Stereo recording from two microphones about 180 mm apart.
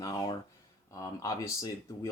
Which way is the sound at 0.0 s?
20° left (ahead or behind).